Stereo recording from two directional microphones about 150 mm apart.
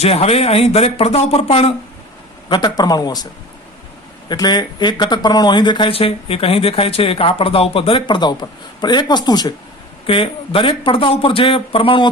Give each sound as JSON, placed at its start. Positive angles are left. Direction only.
{"t": 0.0, "sound": "speech", "side_deg": 45}
{"t": 2.5, "sound": "speech", "side_deg": 30}
{"t": 4.3, "sound": "speech", "side_deg": 30}